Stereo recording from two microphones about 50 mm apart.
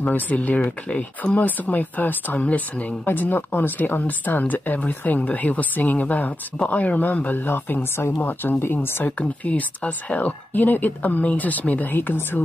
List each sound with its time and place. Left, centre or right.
0.1 s speech: left
9.2 s speech: left